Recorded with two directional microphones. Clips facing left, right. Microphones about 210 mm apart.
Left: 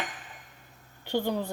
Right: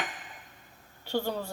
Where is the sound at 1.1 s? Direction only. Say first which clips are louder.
Left 2 dB; 15° left (ahead or behind).